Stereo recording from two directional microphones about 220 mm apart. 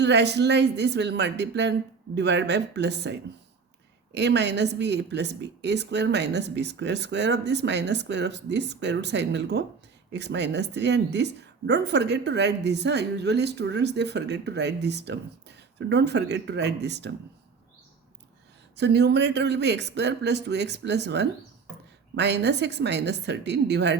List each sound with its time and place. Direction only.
0.0 s a woman's voice: 50° right (ahead or behind)
18.8 s a woman's voice: 50° right (ahead or behind)